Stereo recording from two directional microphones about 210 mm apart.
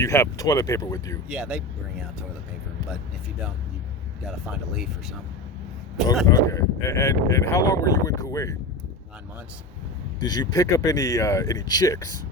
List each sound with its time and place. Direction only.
0.0 s speech: 15° left (ahead or behind)
1.3 s speech: 5° right (ahead or behind)
4.3 s speech: centre (ahead or behind)
6.3 s speech: 15° left (ahead or behind)
10.2 s speech: 20° left (ahead or behind)